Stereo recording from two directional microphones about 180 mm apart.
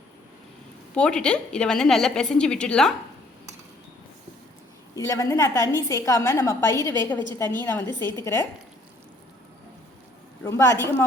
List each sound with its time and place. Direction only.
0.9 s a woman's voice: 5° left (ahead or behind)
4.9 s a woman's voice: 15° left (ahead or behind)
10.4 s a woman's voice: 15° left (ahead or behind)